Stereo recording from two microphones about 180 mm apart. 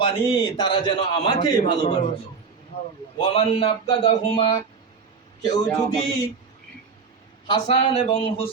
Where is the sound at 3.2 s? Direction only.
35° left (ahead or behind).